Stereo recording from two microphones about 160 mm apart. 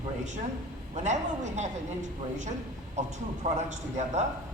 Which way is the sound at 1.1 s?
45° right (ahead or behind).